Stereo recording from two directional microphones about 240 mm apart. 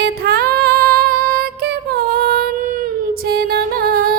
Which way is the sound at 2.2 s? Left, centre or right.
Right.